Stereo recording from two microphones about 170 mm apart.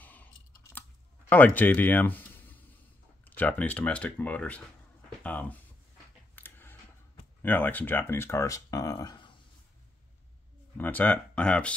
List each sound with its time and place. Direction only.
0.0 s chewing: 10° left (ahead or behind)
1.3 s speech: 10° left (ahead or behind)
6.3 s a sound: 10° left (ahead or behind)
7.4 s speech: 10° left (ahead or behind)
10.8 s speech: 10° left (ahead or behind)